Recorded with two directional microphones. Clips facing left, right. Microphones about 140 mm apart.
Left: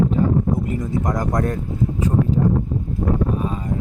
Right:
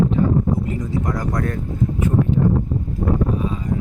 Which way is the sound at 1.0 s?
45° left (ahead or behind).